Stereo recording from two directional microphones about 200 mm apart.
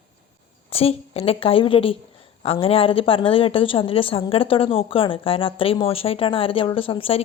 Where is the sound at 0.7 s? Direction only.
30° left (ahead or behind).